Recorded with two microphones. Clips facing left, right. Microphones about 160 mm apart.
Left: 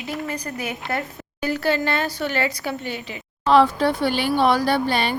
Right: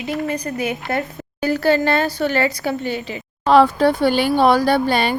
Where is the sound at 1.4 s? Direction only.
40° right (ahead or behind).